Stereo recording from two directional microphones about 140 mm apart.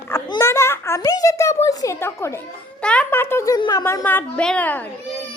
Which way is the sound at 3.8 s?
20° left (ahead or behind).